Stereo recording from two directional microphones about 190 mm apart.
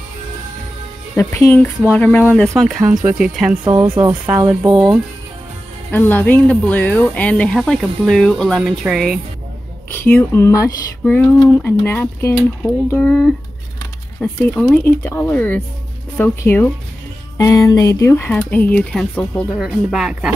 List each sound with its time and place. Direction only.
1.1 s speech: 15° left (ahead or behind); by 3.5 s 5° right (ahead or behind)
3.6 s speech: 25° right (ahead or behind)
5.9 s speech: 10° left (ahead or behind)
9.9 s speech: 10° left (ahead or behind)